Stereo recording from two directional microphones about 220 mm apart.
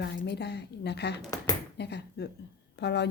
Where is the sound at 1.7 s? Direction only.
50° left (ahead or behind).